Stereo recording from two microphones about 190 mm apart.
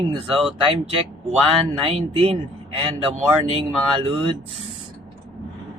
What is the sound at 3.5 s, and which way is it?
Speech, 30° right (ahead or behind).